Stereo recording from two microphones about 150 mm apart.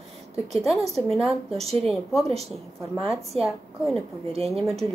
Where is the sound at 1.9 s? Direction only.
Centre (ahead or behind).